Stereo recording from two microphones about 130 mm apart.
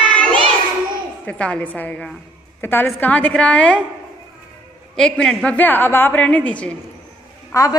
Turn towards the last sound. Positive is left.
turn(degrees=25)  # may be behind; listen again after turning